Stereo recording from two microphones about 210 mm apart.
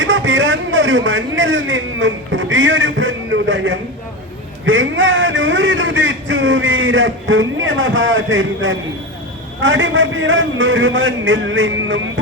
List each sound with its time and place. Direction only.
0.0 s a man's voice: 65° right (ahead or behind)